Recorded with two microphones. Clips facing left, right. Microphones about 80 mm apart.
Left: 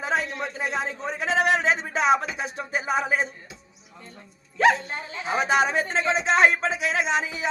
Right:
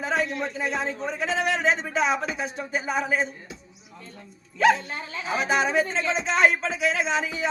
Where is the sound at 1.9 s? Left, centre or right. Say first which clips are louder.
Left 3 dB; left.